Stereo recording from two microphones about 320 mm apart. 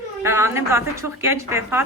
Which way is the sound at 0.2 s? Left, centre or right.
Centre.